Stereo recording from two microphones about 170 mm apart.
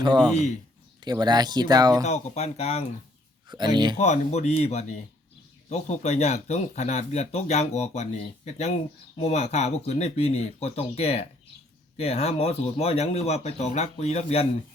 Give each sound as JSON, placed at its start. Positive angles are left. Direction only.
{"t": 0.0, "sound": "speech", "side_deg": -25}
{"t": 2.0, "sound": "speech", "side_deg": 40}
{"t": 3.5, "sound": "speech", "side_deg": -25}
{"t": 3.9, "sound": "speech", "side_deg": 40}